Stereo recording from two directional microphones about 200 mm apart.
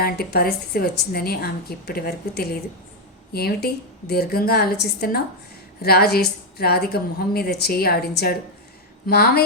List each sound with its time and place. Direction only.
0.0 s a woman's voice: 50° left (ahead or behind)